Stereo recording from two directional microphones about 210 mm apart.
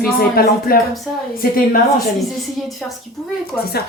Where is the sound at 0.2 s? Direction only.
45° left (ahead or behind).